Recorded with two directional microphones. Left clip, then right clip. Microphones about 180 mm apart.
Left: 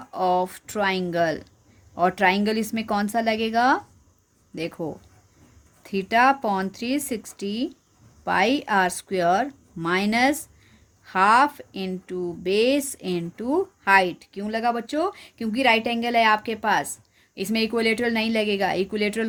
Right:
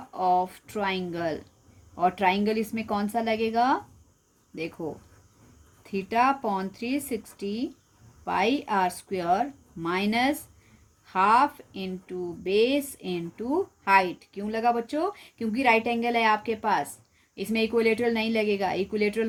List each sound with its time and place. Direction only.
0.1 s speech: 40° left (ahead or behind)